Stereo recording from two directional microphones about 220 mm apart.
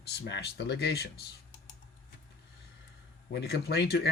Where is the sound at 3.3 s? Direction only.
45° left (ahead or behind).